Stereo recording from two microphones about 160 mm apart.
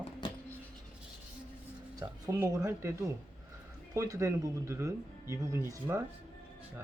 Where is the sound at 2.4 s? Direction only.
15° right (ahead or behind).